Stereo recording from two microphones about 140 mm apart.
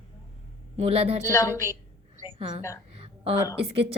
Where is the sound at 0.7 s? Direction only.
45° right (ahead or behind).